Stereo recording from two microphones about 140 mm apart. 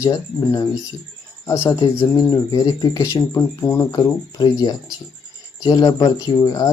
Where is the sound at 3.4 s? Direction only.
15° left (ahead or behind).